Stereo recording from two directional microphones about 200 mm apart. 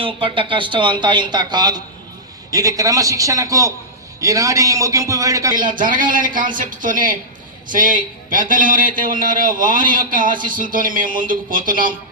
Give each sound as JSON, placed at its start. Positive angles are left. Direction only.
{"t": 0.0, "sound": "a man's voice", "side_deg": -25}
{"t": 5.5, "sound": "a man's voice", "side_deg": -40}